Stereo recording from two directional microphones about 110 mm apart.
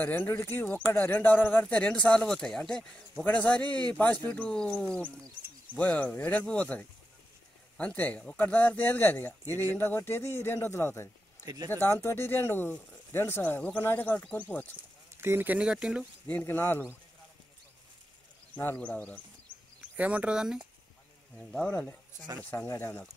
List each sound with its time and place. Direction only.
0.0 s speech: 15° left (ahead or behind)
3.6 s speech: 40° right (ahead or behind)
3.9 s speech: 15° left (ahead or behind)
11.4 s speech: 30° right (ahead or behind)
11.7 s speech: 20° left (ahead or behind)
15.1 s speech: 20° right (ahead or behind)
16.3 s speech: 15° left (ahead or behind)
18.5 s speech: 15° left (ahead or behind)
20.0 s speech: 10° right (ahead or behind)
21.4 s speech: 5° left (ahead or behind)
22.4 s speech: 20° left (ahead or behind)